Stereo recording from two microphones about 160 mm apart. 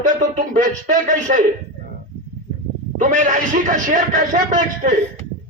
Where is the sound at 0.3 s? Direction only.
55° right (ahead or behind).